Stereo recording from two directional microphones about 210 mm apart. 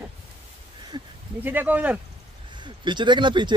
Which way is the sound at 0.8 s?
15° right (ahead or behind).